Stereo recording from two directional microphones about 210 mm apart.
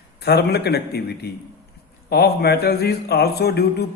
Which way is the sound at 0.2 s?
50° left (ahead or behind).